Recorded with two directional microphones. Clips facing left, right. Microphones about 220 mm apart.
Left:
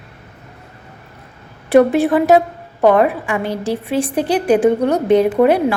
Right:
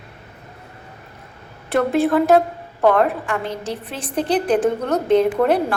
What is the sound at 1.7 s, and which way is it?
A woman's voice, 15° left (ahead or behind).